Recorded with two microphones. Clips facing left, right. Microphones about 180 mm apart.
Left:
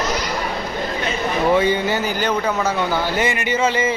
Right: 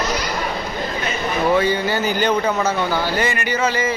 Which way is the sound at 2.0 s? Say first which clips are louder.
Right 2 dB; 5° left (ahead or behind).